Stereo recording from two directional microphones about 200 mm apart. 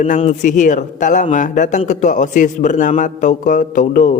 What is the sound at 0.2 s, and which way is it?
A man's voice, 35° left (ahead or behind).